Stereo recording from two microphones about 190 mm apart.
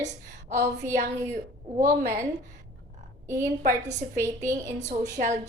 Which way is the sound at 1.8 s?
45° right (ahead or behind).